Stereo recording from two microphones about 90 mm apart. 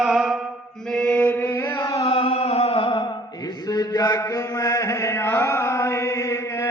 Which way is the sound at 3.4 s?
45° left (ahead or behind).